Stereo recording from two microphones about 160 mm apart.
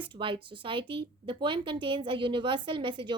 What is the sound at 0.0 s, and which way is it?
A woman's voice, 30° right (ahead or behind).